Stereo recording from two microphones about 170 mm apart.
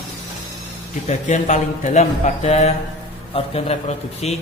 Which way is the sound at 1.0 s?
45° left (ahead or behind).